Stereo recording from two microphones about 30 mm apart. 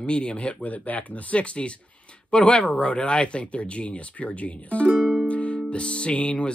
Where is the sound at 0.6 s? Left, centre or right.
Left.